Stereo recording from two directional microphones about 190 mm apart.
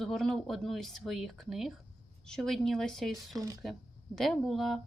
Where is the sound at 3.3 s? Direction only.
20° right (ahead or behind).